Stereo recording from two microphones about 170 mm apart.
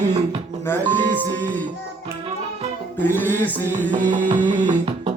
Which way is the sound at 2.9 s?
10° left (ahead or behind).